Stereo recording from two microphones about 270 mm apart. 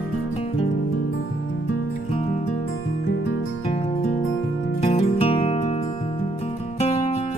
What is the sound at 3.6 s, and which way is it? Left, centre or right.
Music, left.